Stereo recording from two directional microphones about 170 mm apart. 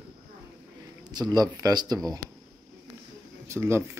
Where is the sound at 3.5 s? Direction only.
15° right (ahead or behind).